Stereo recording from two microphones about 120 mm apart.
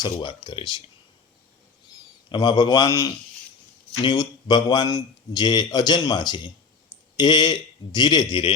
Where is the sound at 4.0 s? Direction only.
40° left (ahead or behind).